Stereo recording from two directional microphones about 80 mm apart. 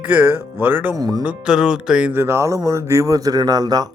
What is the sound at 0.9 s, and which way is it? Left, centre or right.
Speech, right.